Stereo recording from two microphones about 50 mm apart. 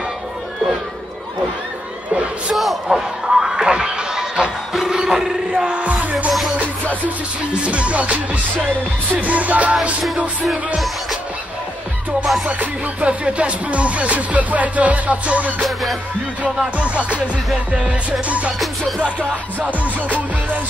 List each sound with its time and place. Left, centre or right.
2.5 s speech: centre
3.3 s music: centre
5.9 s music: right
7.6 s music: right
12.4 s music: right
15.6 s music: centre
16.7 s music: right